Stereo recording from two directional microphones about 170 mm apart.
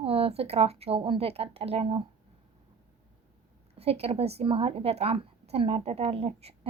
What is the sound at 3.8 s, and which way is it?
A woman's voice, 35° right (ahead or behind).